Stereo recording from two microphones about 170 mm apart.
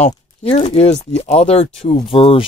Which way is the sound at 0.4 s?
40° left (ahead or behind).